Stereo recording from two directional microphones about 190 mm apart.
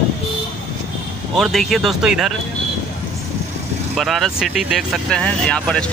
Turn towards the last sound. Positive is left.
turn(degrees=5)  # may be behind; listen again after turning